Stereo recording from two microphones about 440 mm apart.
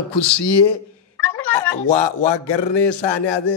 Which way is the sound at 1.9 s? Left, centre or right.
Left.